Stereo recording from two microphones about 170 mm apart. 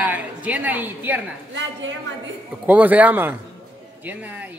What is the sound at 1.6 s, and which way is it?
Speech, 90° right.